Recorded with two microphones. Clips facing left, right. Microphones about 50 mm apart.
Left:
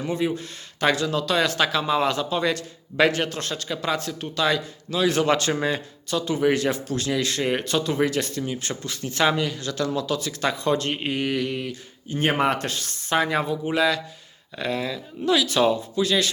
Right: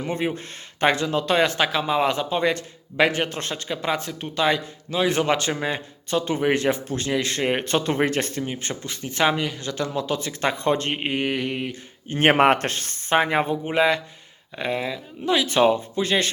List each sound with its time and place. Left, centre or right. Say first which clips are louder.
0.1 s a man's voice: left 1 dB; right; by 5.5 s centre
6.1 s a man's voice: even; right
12.0 s a man's voice: right 5 dB; right